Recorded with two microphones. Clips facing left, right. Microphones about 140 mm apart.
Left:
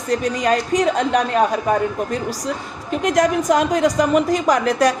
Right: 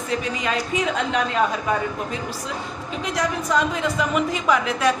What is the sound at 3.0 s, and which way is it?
A woman's voice, 50° left (ahead or behind).